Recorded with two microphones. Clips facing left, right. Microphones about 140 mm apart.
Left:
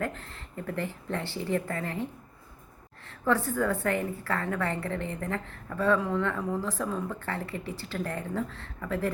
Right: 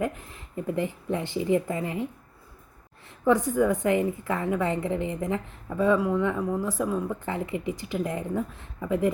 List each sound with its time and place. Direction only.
0.0 s a woman's voice: 15° right (ahead or behind)
3.1 s a woman's voice: 15° right (ahead or behind)